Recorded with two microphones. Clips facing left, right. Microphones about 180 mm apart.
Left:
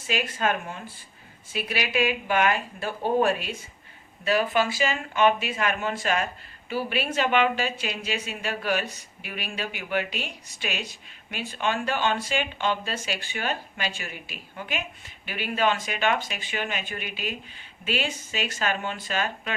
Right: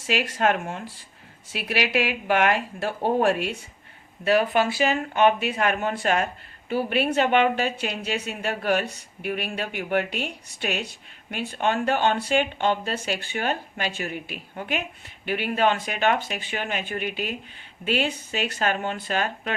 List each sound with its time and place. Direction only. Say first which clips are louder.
0.0 s a woman's voice: right 4 dB; 75° right (ahead or behind); by 19.5 s 50° right (ahead or behind)